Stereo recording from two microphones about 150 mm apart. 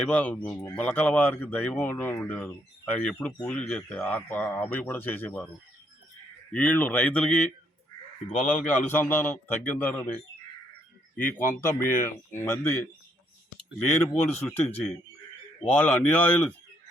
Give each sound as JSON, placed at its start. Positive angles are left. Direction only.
{"t": 0.1, "sound": "speech", "side_deg": 10}
{"t": 6.5, "sound": "speech", "side_deg": 10}
{"t": 8.6, "sound": "speech", "side_deg": 15}
{"t": 11.2, "sound": "speech", "side_deg": 15}
{"t": 14.0, "sound": "speech", "side_deg": 10}